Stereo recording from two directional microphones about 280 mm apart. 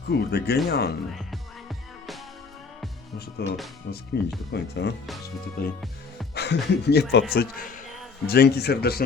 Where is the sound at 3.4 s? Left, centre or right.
Left.